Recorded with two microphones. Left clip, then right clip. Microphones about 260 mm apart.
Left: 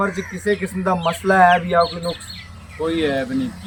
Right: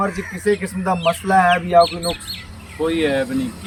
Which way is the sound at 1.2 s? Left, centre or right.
Centre.